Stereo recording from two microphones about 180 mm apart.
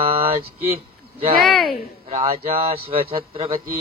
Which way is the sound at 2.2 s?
35° right (ahead or behind).